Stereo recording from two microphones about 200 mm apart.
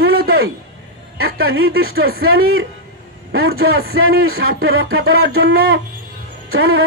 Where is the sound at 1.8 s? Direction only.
90° right.